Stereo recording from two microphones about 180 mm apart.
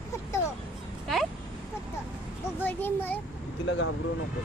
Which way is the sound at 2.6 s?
10° left (ahead or behind).